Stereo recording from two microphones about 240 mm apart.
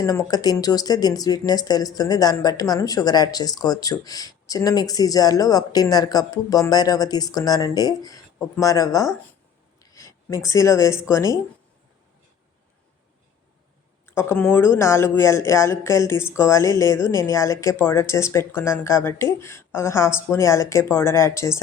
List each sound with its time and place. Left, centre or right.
0.0 s speech: centre
14.2 s speech: centre